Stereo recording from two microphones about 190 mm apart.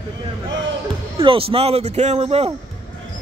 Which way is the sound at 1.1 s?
30° right (ahead or behind).